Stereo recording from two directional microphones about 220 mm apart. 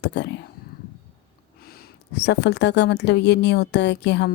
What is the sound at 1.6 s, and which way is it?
A woman's voice, 45° left (ahead or behind).